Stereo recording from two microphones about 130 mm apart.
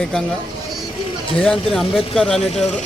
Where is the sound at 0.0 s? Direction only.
5° left (ahead or behind).